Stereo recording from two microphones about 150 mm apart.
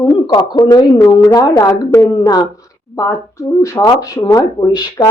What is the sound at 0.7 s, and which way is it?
Speech, 25° left (ahead or behind).